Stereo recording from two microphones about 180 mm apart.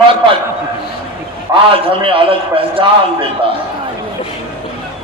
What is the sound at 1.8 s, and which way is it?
A man's voice, 30° right (ahead or behind).